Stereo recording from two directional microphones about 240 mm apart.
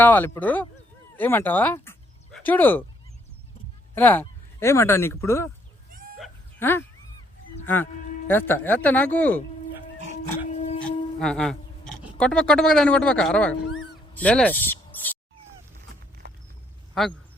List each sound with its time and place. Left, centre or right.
0.0 s speech: centre
3.9 s speech: centre
5.9 s a sound: right
6.1 s dog: centre
7.6 s speech: centre
10.8 s speech: centre
16.2 s a sound: right
16.9 s a man's voice: centre